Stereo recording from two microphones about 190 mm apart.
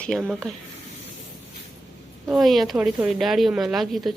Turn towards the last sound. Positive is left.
turn(degrees=0)  # may be behind; listen again after turning